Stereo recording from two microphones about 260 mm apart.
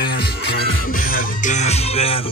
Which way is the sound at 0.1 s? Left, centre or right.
Left.